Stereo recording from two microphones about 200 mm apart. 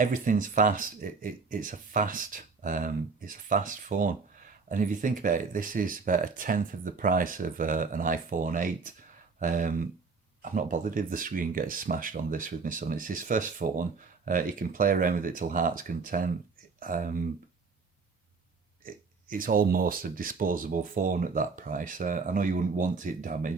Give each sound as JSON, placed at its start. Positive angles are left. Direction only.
{"t": 0.0, "sound": "speech", "side_deg": -40}
{"t": 19.3, "sound": "speech", "side_deg": -45}